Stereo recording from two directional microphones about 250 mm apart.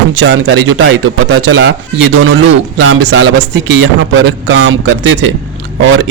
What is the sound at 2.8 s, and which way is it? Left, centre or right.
Speech, right.